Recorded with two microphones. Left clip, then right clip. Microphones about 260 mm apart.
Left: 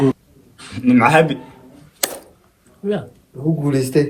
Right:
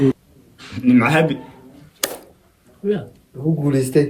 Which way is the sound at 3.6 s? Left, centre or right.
Centre.